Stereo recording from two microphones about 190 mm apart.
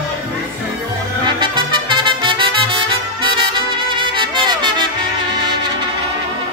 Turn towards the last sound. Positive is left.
turn(degrees=-25)  # may be behind; listen again after turning